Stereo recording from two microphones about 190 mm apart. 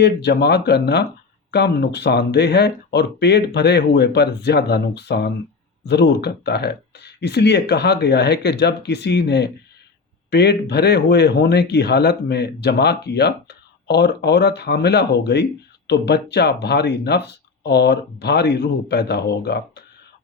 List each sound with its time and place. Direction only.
0.0 s speech: 65° left (ahead or behind)